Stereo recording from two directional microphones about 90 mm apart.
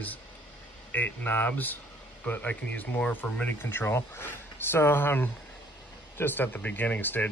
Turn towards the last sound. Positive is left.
turn(degrees=20)  # may be behind; listen again after turning